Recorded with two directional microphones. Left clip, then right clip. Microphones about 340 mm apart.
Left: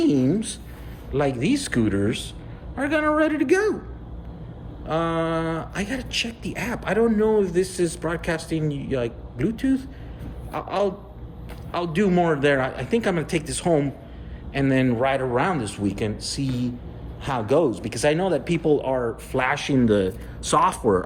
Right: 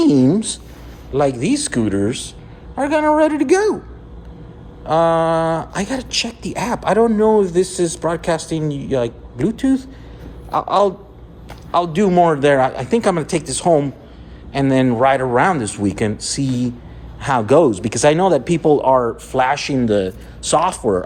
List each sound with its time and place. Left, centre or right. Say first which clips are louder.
0.0 s a woman's voice: right 7 dB; centre
4.9 s a woman's voice: right 10 dB; centre